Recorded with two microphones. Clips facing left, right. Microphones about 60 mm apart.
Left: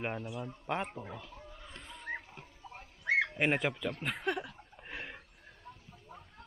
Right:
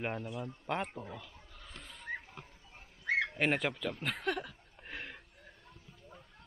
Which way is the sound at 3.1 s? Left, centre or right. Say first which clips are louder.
Left 2 dB; centre.